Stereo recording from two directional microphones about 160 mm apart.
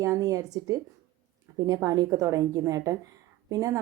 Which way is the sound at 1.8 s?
20° right (ahead or behind).